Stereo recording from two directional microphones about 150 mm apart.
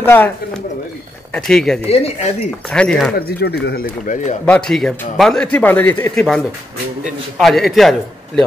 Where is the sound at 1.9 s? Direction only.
45° left (ahead or behind).